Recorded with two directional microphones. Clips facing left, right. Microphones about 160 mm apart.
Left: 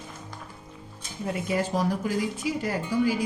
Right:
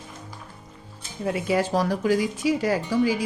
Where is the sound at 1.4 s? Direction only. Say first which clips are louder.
Right 3 dB; 90° right.